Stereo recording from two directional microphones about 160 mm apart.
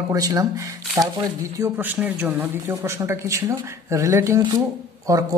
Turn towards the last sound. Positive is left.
turn(degrees=-20)  # may be behind; listen again after turning